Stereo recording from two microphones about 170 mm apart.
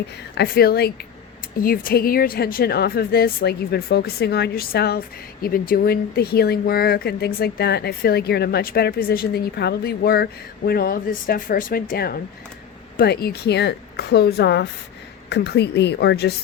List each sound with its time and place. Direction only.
0.3 s speech: 65° left (ahead or behind)
1.6 s a woman's voice: 60° left (ahead or behind); by 16.3 s 75° left (ahead or behind)